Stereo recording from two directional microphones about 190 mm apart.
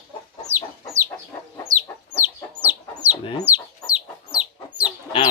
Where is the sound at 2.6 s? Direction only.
10° right (ahead or behind).